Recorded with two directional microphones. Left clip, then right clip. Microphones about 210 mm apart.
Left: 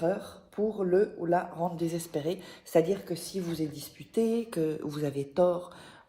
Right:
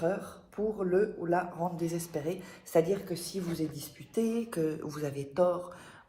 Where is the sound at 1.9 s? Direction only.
60° left (ahead or behind).